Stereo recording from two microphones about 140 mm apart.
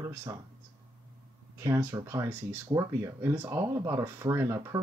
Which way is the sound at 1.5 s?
20° right (ahead or behind).